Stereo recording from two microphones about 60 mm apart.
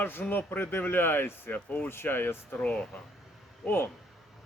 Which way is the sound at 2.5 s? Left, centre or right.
Left.